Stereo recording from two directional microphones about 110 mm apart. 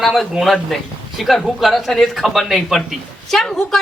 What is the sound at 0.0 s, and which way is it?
A woman's voice, centre (ahead or behind).